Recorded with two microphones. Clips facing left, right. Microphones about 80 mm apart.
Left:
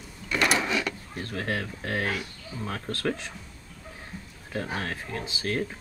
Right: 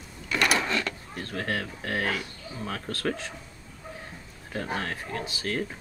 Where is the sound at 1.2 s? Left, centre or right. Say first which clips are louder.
Even; left.